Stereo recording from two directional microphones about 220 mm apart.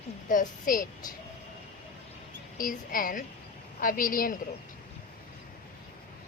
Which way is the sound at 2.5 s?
40° left (ahead or behind).